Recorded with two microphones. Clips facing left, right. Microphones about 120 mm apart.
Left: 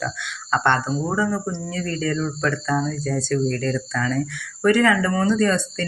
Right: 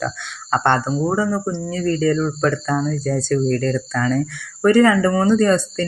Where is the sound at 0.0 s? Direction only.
35° right (ahead or behind).